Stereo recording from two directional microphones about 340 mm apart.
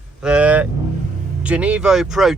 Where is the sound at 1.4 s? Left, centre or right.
Centre.